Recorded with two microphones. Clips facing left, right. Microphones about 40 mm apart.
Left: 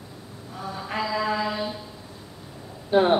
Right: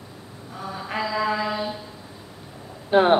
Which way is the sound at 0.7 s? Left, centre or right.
Centre.